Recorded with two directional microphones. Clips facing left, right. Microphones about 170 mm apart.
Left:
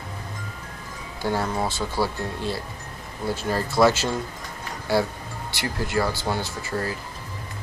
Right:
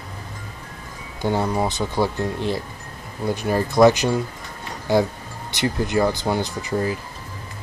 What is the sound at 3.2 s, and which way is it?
Music, 15° right (ahead or behind).